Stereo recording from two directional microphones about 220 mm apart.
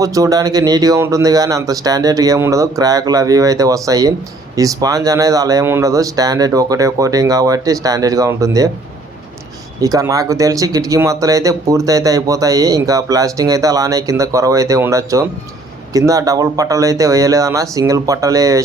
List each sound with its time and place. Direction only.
0.0 s speech: 15° right (ahead or behind)
9.8 s speech: 15° right (ahead or behind)